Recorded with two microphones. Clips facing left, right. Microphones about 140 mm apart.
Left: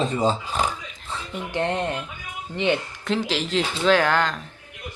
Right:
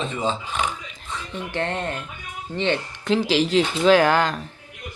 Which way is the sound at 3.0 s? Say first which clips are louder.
Right 6 dB; centre (ahead or behind).